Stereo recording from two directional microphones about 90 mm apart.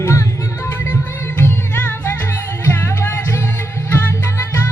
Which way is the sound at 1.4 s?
25° left (ahead or behind).